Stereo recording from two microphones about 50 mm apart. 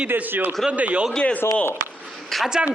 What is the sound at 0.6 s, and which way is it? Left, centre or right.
Speech, right.